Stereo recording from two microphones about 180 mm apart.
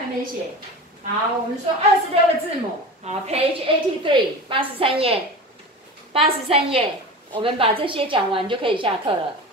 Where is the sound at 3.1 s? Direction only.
35° right (ahead or behind).